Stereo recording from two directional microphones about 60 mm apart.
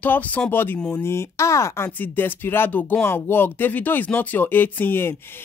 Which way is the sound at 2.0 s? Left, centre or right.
Left.